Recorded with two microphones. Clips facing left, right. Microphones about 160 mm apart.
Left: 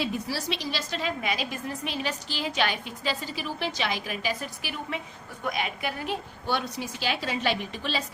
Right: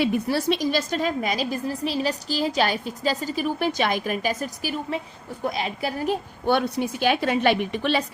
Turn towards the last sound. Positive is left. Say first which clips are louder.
# right 8 dB
turn(degrees=-60)  # may be behind; listen again after turning